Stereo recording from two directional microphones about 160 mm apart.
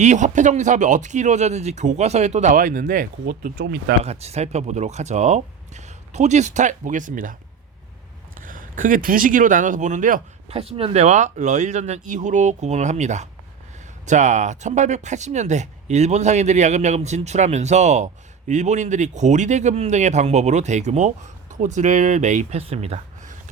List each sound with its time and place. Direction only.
0.0 s speech: 50° right (ahead or behind); by 3.9 s 70° right (ahead or behind)
4.0 s speech: 40° right (ahead or behind)
8.4 s speech: 55° right (ahead or behind)
10.6 s speech: 35° right (ahead or behind)